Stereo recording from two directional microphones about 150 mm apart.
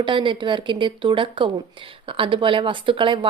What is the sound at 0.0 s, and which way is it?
A woman's voice, 35° right (ahead or behind).